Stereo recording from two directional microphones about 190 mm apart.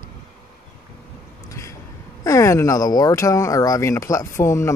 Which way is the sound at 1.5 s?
15° left (ahead or behind).